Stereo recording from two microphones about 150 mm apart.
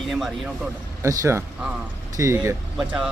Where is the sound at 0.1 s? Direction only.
5° right (ahead or behind).